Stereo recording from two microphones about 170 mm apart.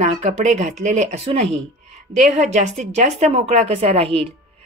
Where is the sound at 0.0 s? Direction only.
40° right (ahead or behind).